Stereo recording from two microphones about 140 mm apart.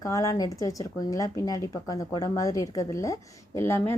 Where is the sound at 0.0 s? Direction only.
25° left (ahead or behind).